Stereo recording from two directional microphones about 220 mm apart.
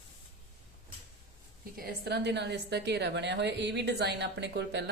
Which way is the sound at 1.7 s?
45° right (ahead or behind).